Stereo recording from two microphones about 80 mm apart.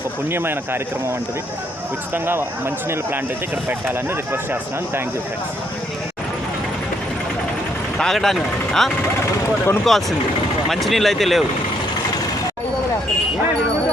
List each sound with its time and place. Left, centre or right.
0.3 s speech: right
2.1 s speech: right
7.9 s speech: centre